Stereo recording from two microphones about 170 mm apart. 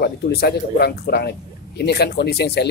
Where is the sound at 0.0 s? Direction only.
70° left (ahead or behind).